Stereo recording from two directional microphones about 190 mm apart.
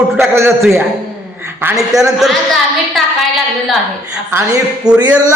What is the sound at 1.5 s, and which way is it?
Speech, 5° right (ahead or behind).